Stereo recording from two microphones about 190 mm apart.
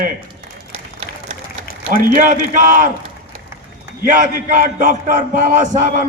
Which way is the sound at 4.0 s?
45° right (ahead or behind).